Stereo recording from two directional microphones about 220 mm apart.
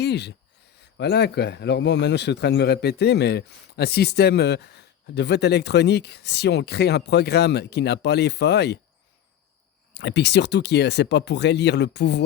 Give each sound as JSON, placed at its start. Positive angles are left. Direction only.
{"t": 0.0, "sound": "a man's voice", "side_deg": 50}
{"t": 9.9, "sound": "a man's voice", "side_deg": 50}